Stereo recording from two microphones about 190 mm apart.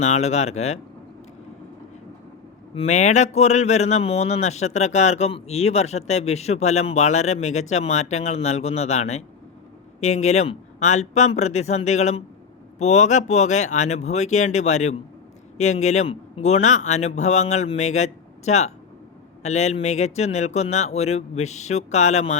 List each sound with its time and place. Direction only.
0.0 s speech: 35° left (ahead or behind)
2.7 s speech: 35° left (ahead or behind)